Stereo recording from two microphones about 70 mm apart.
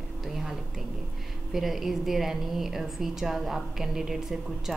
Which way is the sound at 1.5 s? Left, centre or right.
Centre.